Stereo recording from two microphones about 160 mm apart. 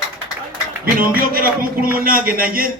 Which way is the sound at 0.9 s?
65° right (ahead or behind).